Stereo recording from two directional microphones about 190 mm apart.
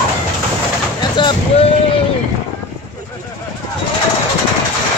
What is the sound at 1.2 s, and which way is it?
Boat, 25° left (ahead or behind).